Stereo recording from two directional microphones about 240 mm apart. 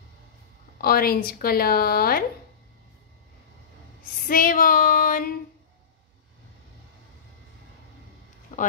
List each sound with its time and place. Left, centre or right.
0.7 s speech: left
4.0 s speech: left
8.5 s a sound: left